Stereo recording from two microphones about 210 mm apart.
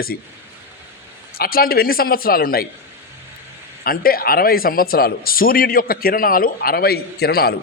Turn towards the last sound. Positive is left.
turn(degrees=45)  # may be behind; listen again after turning